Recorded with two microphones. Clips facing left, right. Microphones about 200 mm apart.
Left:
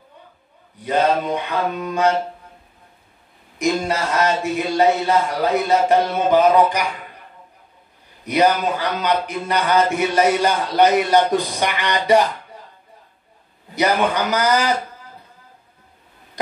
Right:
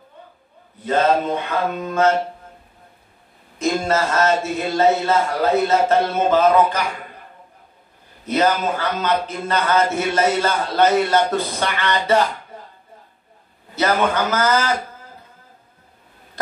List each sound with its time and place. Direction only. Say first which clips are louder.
0.7 s a man's voice: right 1 dB; 15° left (ahead or behind)
3.5 s a man's voice: right 1 dB; 15° left (ahead or behind)
8.3 s a man's voice: left 1 dB; 15° left (ahead or behind)
13.7 s a man's voice: even; 15° left (ahead or behind)